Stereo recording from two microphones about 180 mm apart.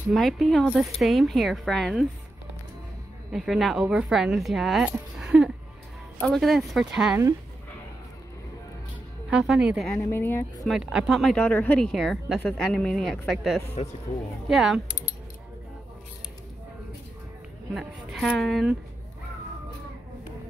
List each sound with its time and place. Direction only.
0.1 s speech: centre (ahead or behind)
3.3 s speech: centre (ahead or behind)
9.3 s speech: 5° right (ahead or behind)
9.8 s speech: 10° left (ahead or behind)
10.6 s speech: centre (ahead or behind)
13.8 s speech: 35° left (ahead or behind)
14.5 s speech: centre (ahead or behind)
17.7 s speech: centre (ahead or behind)